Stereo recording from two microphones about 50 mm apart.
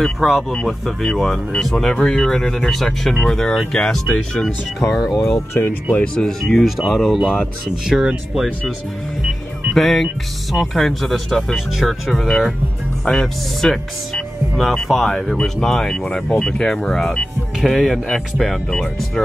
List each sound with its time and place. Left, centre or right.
0.0 s speech: centre
4.9 s speech: centre
5.5 s speech: left
5.9 s speech: left
6.4 s speech: centre
9.8 s speech: centre
11.5 s speech: centre